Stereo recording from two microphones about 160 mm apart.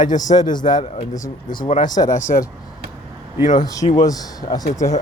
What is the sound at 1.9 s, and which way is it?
Speech, 25° left (ahead or behind).